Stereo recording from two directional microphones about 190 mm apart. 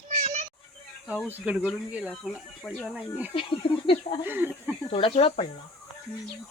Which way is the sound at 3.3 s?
30° left (ahead or behind).